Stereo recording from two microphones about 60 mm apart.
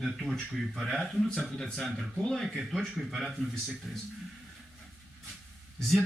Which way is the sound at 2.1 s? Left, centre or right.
Centre.